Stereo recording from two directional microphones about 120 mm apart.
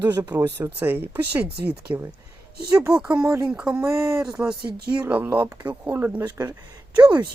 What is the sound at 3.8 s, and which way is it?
Speech, 25° right (ahead or behind).